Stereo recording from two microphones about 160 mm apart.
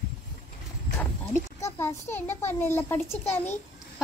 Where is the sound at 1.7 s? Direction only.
15° left (ahead or behind).